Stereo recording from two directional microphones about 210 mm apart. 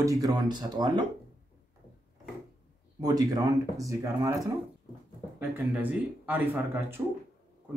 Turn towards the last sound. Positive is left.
turn(degrees=-10)  # may be behind; listen again after turning